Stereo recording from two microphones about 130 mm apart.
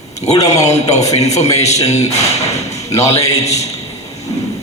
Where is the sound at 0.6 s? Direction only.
60° left (ahead or behind).